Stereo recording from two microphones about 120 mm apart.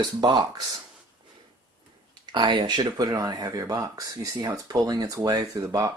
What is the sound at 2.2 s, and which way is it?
Speech, 40° right (ahead or behind).